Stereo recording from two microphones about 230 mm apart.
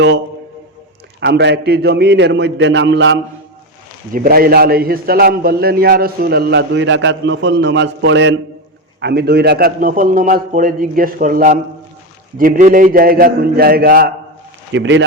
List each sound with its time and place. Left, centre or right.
1.2 s a man's voice: right
4.1 s a man's voice: right
14.7 s a man's voice: right